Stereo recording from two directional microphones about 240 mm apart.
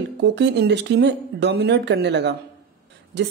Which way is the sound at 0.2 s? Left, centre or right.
Right.